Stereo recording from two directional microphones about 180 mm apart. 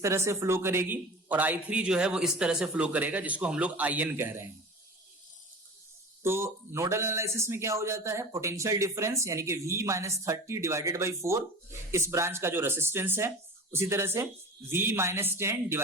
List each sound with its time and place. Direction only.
0.0 s speech: 15° right (ahead or behind)
6.2 s speech: 15° right (ahead or behind)